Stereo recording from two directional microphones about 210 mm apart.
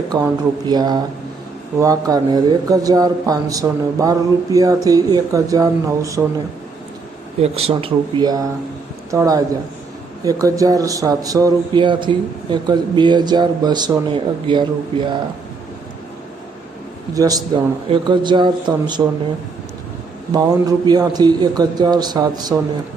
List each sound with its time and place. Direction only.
0.1 s speech: 20° right (ahead or behind)
7.4 s a man's voice: 30° right (ahead or behind)
10.4 s speech: 15° right (ahead or behind)
17.2 s speech: 15° right (ahead or behind)
20.3 s speech: 20° right (ahead or behind)